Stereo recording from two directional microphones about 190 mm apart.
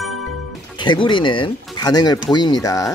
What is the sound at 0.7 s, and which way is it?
Speech, 25° left (ahead or behind).